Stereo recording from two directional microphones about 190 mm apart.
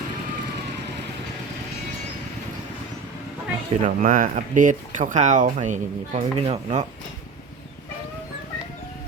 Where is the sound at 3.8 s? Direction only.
45° right (ahead or behind).